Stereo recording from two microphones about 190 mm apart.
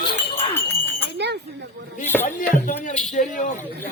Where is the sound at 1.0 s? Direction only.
65° right (ahead or behind).